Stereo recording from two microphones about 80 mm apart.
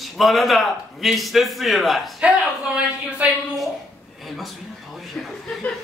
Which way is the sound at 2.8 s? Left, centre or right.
Centre.